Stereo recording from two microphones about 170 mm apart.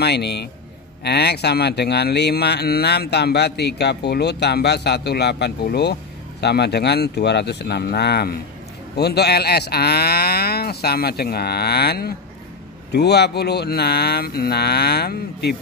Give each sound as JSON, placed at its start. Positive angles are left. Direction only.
{"t": 0.0, "sound": "speech", "side_deg": 75}